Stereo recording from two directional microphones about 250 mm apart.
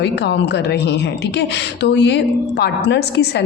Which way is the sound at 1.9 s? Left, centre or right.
Left.